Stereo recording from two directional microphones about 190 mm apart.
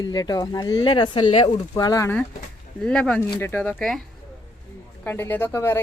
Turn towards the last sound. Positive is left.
turn(degrees=15)  # may be behind; listen again after turning